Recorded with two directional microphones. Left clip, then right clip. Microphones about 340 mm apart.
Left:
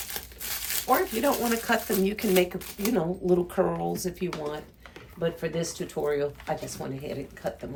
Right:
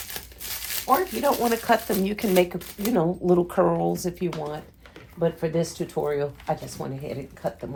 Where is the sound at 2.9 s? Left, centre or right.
Centre.